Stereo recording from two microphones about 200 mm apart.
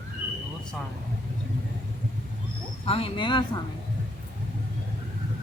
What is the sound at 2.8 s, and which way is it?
Speech, 30° left (ahead or behind).